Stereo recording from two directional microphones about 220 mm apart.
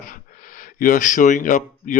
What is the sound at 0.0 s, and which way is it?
Speech, 35° left (ahead or behind).